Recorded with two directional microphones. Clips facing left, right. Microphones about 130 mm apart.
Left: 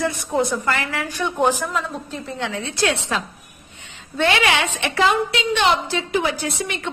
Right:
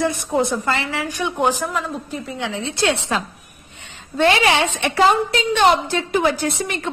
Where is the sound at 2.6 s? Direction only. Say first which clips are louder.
Right 2 dB; 25° right (ahead or behind).